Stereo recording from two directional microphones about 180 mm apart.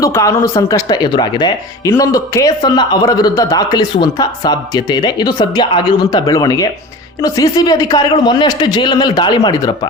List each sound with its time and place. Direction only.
0.0 s speech: 15° left (ahead or behind)